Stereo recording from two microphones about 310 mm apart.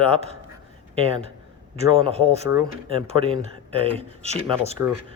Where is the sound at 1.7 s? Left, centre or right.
Centre.